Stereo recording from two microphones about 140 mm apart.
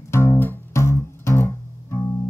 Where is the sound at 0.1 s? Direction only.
15° left (ahead or behind).